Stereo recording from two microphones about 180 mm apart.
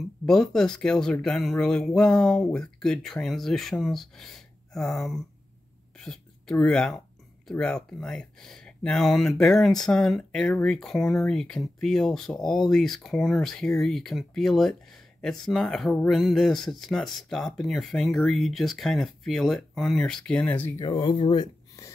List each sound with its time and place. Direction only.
0.3 s speech: 5° left (ahead or behind)
20.8 s speech: 25° left (ahead or behind)